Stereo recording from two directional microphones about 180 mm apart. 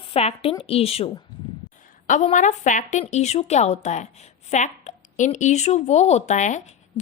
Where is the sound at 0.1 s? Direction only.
35° left (ahead or behind).